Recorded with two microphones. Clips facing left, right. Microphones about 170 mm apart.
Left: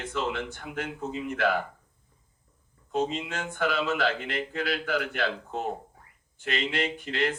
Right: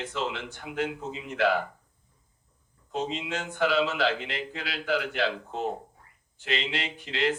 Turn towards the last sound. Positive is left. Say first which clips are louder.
# left 1 dB
turn(degrees=50)  # may be behind; listen again after turning